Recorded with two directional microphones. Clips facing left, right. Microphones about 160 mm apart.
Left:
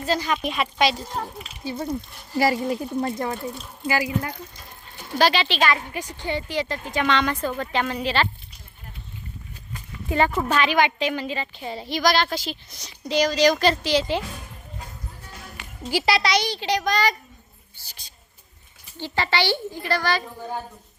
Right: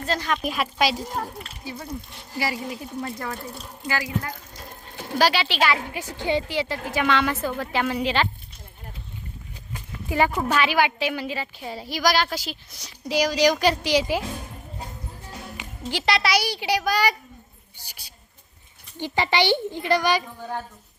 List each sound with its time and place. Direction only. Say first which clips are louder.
0.0 s speech: left 2 dB; centre (ahead or behind)
1.6 s speech: left 7 dB; 30° left (ahead or behind)
3.0 s speech: left 5 dB; 25° left (ahead or behind)
5.1 s a woman's voice: left 1 dB; 10° right (ahead or behind)
10.1 s a woman's voice: left 1 dB; 10° right (ahead or behind)
15.8 s a woman's voice: left 2 dB; 5° left (ahead or behind); by 20.2 s 15° right (ahead or behind)